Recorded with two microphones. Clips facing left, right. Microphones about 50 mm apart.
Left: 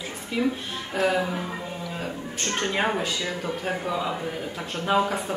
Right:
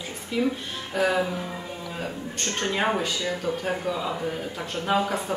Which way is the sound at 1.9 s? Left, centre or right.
Centre.